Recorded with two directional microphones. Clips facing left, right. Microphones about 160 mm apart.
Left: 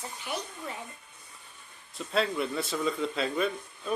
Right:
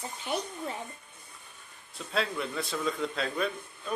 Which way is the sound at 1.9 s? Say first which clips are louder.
Left 3 dB; centre (ahead or behind).